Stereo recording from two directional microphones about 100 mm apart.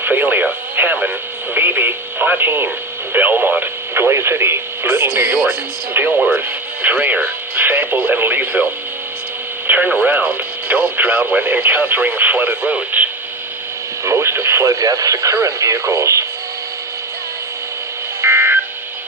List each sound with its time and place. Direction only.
0.0 s radio: 15° right (ahead or behind)
5.5 s speech: 20° right (ahead or behind)
6.1 s speech: 10° right (ahead or behind)
6.8 s radio: 15° right (ahead or behind)
9.6 s speech: 15° right (ahead or behind)
14.0 s speech: 25° right (ahead or behind)
18.2 s a sound: 25° right (ahead or behind)